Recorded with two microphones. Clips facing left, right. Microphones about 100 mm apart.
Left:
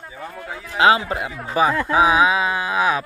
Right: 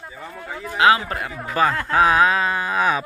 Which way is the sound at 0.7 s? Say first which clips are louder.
Left 1 dB; 25° left (ahead or behind).